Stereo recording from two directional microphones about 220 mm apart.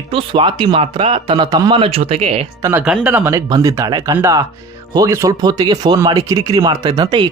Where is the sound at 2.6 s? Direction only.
10° right (ahead or behind).